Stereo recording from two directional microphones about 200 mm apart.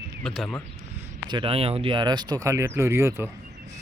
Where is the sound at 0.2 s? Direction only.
Centre (ahead or behind).